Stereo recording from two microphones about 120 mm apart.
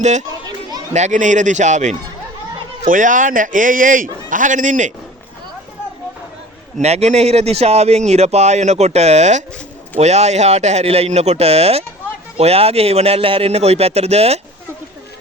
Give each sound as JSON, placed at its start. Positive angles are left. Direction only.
{"t": 0.0, "sound": "a child's voice", "side_deg": -75}
{"t": 6.7, "sound": "speech", "side_deg": -65}